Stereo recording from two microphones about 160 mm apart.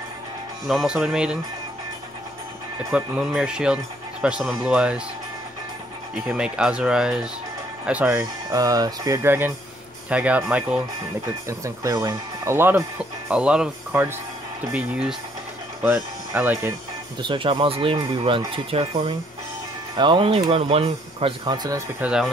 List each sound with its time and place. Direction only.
0.7 s speech: 5° right (ahead or behind)
2.8 s speech: 5° right (ahead or behind)
6.1 s speech: 5° right (ahead or behind)
11.4 s speech: 20° right (ahead or behind)
17.2 s speech: 30° right (ahead or behind)
22.0 s speech: 5° right (ahead or behind)